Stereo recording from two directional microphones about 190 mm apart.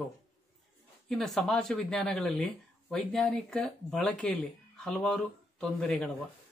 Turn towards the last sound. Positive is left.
turn(degrees=5)  # may be behind; listen again after turning